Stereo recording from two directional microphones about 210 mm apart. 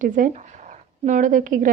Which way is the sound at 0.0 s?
35° right (ahead or behind).